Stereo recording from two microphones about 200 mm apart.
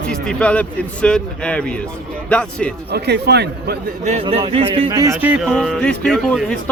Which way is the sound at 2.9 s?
55° right (ahead or behind).